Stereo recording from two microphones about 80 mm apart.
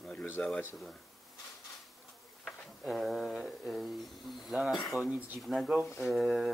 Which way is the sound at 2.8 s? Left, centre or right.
Centre.